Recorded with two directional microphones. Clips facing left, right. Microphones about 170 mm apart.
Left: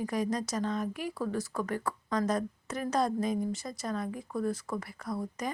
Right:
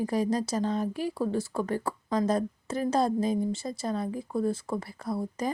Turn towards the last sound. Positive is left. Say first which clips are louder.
# right 4 dB
turn(degrees=-30)  # may be behind; listen again after turning